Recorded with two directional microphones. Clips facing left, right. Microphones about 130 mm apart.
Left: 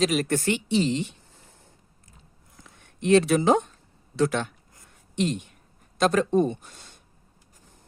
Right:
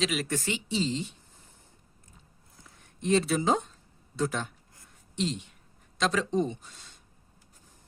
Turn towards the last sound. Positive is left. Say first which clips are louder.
# left 6 dB
turn(degrees=55)  # may be behind; listen again after turning